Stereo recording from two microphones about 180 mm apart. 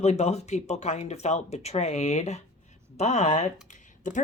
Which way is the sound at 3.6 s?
45° left (ahead or behind).